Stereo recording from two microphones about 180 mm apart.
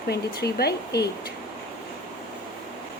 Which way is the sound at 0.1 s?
65° left (ahead or behind).